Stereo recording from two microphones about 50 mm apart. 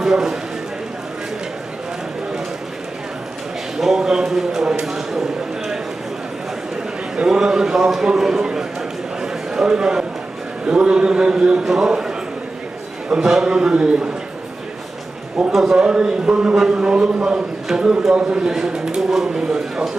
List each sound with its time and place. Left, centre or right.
0.0 s speech: centre
3.8 s speech: centre
7.2 s a man's voice: centre
9.2 s a sound: centre
10.7 s speech: centre
13.2 s speech: centre
15.5 s a man's voice: centre
15.8 s a man's voice: centre